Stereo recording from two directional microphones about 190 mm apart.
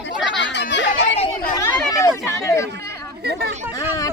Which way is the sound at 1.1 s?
30° left (ahead or behind).